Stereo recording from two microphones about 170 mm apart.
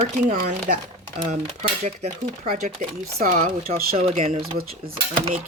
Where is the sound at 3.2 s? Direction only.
55° right (ahead or behind).